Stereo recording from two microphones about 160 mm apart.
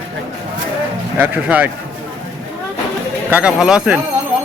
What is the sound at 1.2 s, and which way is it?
Speech, 10° right (ahead or behind).